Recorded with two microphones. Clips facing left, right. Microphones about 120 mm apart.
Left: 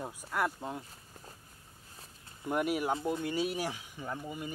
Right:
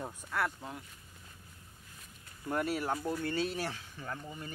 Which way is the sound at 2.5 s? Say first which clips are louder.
Left 2 dB; 15° left (ahead or behind).